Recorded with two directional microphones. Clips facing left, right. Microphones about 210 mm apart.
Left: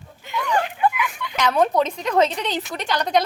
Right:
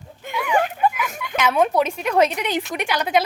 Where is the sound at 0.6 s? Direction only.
45° right (ahead or behind).